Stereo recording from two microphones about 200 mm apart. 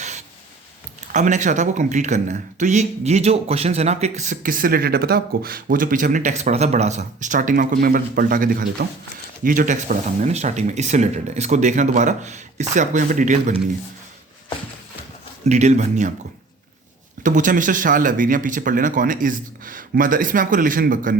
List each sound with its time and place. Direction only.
0.0 s writing: 35° right (ahead or behind)
1.1 s speech: 40° right (ahead or behind)
15.4 s speech: 35° right (ahead or behind)
17.2 s speech: 40° right (ahead or behind)